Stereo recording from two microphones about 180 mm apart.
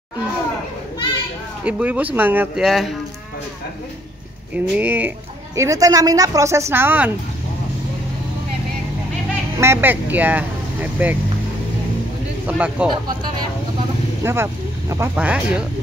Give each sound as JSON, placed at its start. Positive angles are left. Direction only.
{"t": 1.6, "sound": "speech", "side_deg": -5}
{"t": 4.6, "sound": "speech", "side_deg": -10}
{"t": 9.6, "sound": "speech", "side_deg": -10}
{"t": 12.4, "sound": "speech", "side_deg": -5}
{"t": 14.2, "sound": "speech", "side_deg": -15}